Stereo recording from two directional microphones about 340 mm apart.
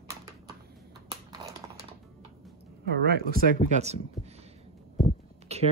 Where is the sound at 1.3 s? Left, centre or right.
Centre.